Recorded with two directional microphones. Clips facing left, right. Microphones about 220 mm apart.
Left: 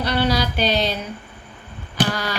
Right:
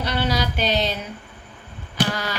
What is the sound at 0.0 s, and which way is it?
Speech, 20° right (ahead or behind).